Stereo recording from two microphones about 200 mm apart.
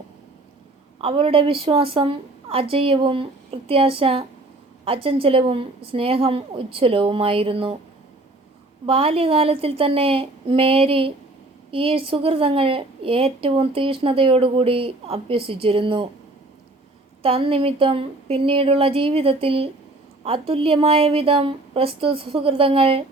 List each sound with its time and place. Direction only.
1.0 s a woman's voice: 30° right (ahead or behind)
8.9 s a woman's voice: 30° right (ahead or behind)
17.2 s a woman's voice: 30° right (ahead or behind)